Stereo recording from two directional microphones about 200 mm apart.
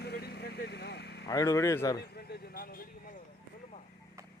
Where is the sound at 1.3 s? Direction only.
15° left (ahead or behind).